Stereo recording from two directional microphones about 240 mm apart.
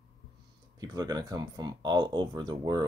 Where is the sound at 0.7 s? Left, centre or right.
Centre.